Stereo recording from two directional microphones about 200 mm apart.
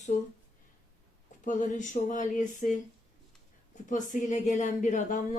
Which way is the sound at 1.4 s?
40° left (ahead or behind).